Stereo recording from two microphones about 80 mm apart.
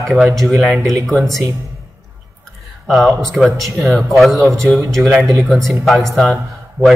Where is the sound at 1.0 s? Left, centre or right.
Centre.